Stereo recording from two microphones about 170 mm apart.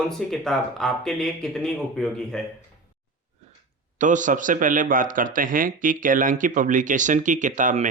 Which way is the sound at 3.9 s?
45° right (ahead or behind).